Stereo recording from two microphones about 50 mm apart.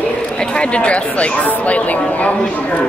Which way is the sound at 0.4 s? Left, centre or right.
Left.